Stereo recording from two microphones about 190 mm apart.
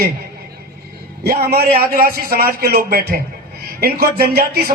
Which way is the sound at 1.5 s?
55° right (ahead or behind).